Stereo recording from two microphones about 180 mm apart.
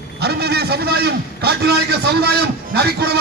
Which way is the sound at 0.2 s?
65° right (ahead or behind).